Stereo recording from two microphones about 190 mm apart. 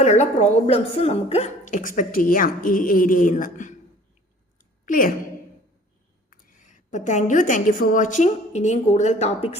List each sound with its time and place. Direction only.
0.0 s a woman's voice: 35° left (ahead or behind)
4.5 s a sound: 45° left (ahead or behind)
6.3 s a woman's voice: 45° left (ahead or behind)